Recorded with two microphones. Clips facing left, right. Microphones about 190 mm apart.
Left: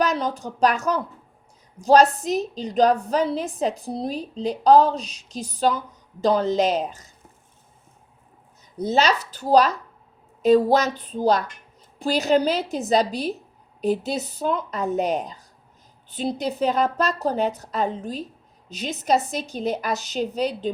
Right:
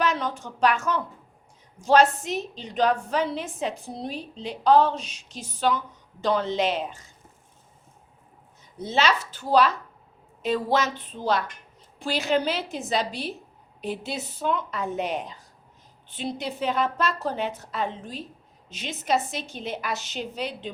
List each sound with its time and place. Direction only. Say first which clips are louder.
0.0 s a woman's voice: left 3 dB; 40° left (ahead or behind)
8.8 s a woman's voice: left 4 dB; 40° left (ahead or behind)